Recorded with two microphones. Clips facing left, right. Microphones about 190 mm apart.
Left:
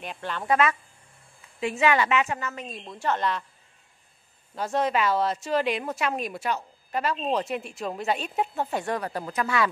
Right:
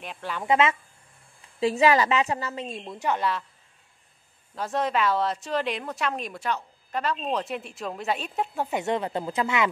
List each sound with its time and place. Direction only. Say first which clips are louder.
0.0 s a woman's voice: even; centre (ahead or behind)
0.5 s speech: right 1 dB; 25° right (ahead or behind)
1.6 s a woman's voice: right 3 dB; 35° right (ahead or behind)
3.0 s a woman's voice: even; 10° right (ahead or behind)
4.6 s a woman's voice: left 1 dB; centre (ahead or behind)
8.6 s speech: right 2 dB; 20° right (ahead or behind)